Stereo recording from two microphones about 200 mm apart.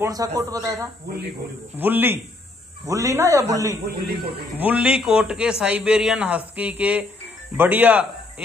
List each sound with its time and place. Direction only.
0.0 s a man's voice: 15° right (ahead or behind)
1.8 s a man's voice: 10° right (ahead or behind)
3.9 s speech: 50° right (ahead or behind)
4.6 s a man's voice: 5° right (ahead or behind)